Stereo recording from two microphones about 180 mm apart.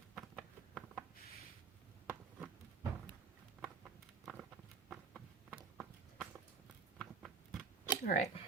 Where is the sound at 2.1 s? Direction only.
10° right (ahead or behind).